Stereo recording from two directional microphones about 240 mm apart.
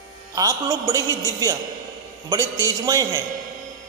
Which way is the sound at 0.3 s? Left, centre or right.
Centre.